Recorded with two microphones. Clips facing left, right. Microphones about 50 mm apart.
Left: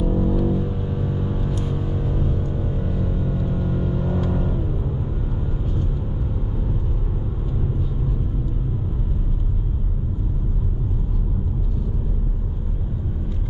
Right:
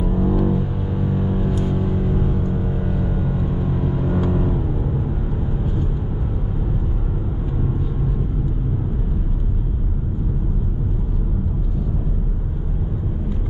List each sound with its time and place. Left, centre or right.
0.0 s vehicle: centre
1.5 s music: centre